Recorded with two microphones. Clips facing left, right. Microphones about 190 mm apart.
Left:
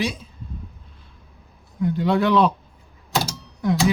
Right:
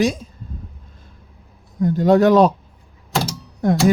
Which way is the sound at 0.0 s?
45° right (ahead or behind).